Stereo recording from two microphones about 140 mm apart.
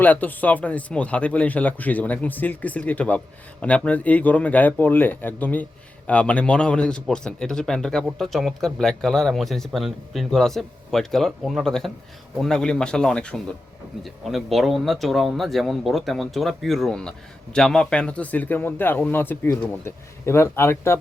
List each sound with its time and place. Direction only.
0.0 s speech: 10° left (ahead or behind)